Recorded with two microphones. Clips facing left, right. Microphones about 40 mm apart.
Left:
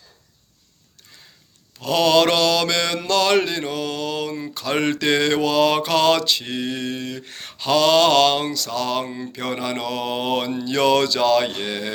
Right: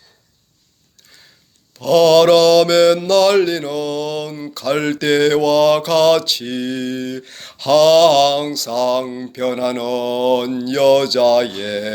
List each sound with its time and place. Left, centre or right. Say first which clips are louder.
1.8 s mantra: right 6 dB; left
11.5 s speech: right 4 dB; centre